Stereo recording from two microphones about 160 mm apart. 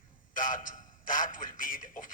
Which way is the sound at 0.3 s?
55° left (ahead or behind).